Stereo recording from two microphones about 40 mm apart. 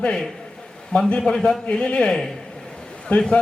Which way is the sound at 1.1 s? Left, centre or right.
Centre.